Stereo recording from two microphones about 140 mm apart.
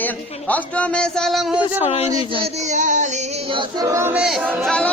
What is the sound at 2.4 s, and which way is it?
Child singing, 55° right (ahead or behind).